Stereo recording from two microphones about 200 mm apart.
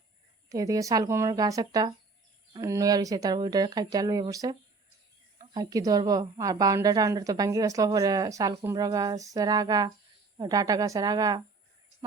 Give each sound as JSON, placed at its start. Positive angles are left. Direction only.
{"t": 0.4, "sound": "a woman's voice", "side_deg": -15}